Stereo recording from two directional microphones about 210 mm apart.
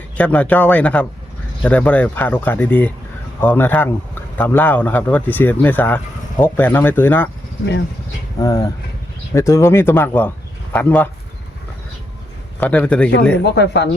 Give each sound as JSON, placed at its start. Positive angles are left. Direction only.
{"t": 0.2, "sound": "speech", "side_deg": 5}
{"t": 8.4, "sound": "speech", "side_deg": 15}
{"t": 12.5, "sound": "a man's voice", "side_deg": 5}
{"t": 13.4, "sound": "speech", "side_deg": 55}